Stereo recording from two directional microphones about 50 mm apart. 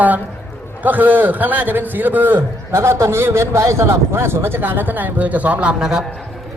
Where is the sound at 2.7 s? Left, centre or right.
Right.